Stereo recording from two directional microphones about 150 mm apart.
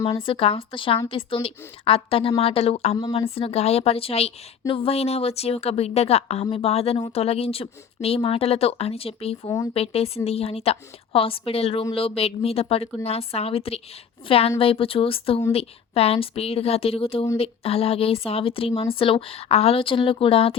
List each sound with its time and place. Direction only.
0.1 s a woman's voice: 35° left (ahead or behind)